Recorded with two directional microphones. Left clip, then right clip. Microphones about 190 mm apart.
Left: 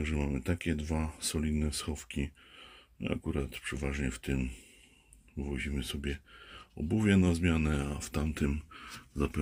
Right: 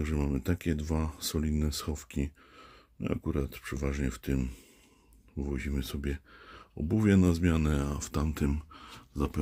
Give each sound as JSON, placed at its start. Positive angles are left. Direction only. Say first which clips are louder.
{"t": 0.0, "sound": "speech", "louder": "right 2 dB", "side_deg": -40}
{"t": 5.5, "sound": "speech", "louder": "even", "side_deg": -40}